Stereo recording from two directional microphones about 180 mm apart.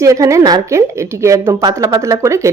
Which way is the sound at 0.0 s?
15° right (ahead or behind).